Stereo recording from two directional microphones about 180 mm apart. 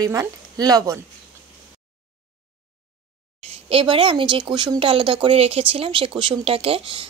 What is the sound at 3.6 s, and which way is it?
Speech, 30° right (ahead or behind).